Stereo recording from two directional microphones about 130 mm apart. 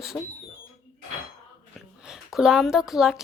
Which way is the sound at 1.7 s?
5° right (ahead or behind).